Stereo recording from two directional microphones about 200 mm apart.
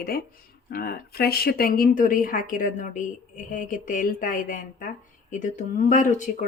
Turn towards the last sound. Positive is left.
turn(degrees=40)  # may be behind; listen again after turning